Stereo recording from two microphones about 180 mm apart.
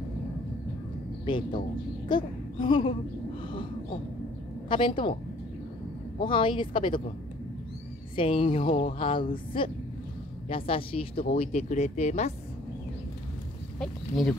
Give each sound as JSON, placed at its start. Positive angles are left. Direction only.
{"t": 1.2, "sound": "speech", "side_deg": 25}
{"t": 4.6, "sound": "a woman's voice", "side_deg": 30}
{"t": 6.1, "sound": "a woman's voice", "side_deg": 30}
{"t": 8.2, "sound": "a woman's voice", "side_deg": 30}
{"t": 13.7, "sound": "speech", "side_deg": 5}